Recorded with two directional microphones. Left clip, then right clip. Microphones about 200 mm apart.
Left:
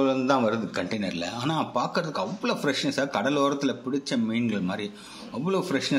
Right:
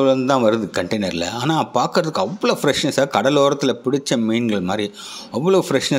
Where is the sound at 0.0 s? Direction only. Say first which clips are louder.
Right 8 dB; 35° right (ahead or behind).